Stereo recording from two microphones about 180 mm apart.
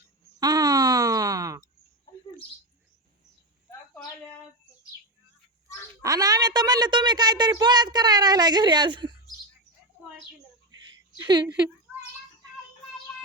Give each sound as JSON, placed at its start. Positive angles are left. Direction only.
{"t": 0.3, "sound": "a sound", "side_deg": -20}
{"t": 6.0, "sound": "speech", "side_deg": -20}
{"t": 11.2, "sound": "speech", "side_deg": -25}